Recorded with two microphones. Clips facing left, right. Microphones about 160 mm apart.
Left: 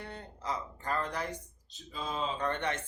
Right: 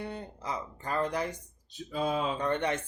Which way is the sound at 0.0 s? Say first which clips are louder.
Right 4 dB; 10° right (ahead or behind).